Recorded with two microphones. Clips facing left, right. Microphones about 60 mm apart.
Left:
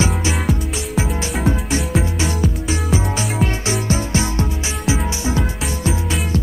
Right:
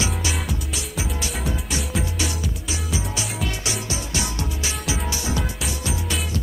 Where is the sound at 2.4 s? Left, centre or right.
Left.